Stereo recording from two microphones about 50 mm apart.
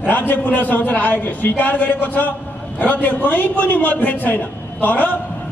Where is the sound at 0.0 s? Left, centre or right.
Left.